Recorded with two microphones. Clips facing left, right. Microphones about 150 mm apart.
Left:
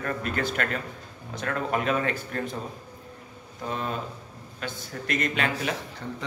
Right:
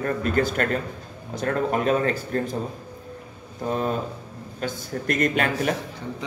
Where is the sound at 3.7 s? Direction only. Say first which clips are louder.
Right 6 dB; 40° right (ahead or behind).